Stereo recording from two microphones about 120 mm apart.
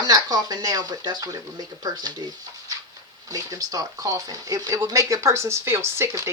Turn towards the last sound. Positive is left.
turn(degrees=-25)  # may be behind; listen again after turning